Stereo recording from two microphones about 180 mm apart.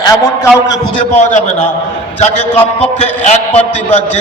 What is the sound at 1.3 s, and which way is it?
A man's voice, 40° left (ahead or behind).